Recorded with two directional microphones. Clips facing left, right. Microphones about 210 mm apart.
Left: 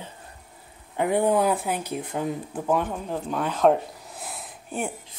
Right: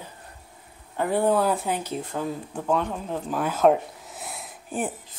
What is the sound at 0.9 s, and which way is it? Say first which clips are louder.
Speech: left 1 dB; 15° left (ahead or behind).